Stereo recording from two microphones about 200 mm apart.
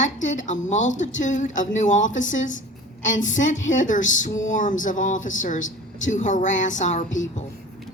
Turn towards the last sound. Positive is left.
turn(degrees=40)  # may be behind; listen again after turning